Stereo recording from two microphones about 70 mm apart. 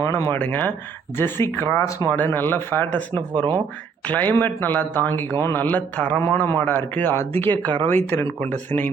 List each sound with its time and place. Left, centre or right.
0.3 s speech: left
3.3 s speech: right
4.1 s speech: left
7.6 s speech: right
7.9 s speech: left